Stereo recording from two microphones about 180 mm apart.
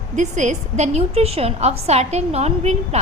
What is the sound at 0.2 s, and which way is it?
A woman's voice, 40° right (ahead or behind).